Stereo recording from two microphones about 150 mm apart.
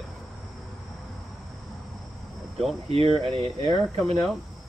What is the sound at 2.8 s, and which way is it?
Speech, 40° right (ahead or behind).